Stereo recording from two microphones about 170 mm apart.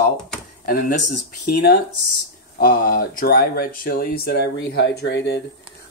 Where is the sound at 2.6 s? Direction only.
55° left (ahead or behind).